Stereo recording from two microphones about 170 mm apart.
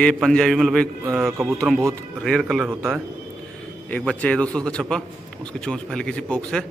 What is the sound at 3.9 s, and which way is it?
A man's voice, 5° left (ahead or behind).